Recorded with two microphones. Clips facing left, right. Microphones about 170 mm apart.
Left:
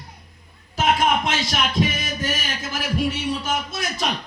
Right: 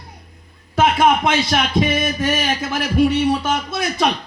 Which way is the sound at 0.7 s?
55° right (ahead or behind).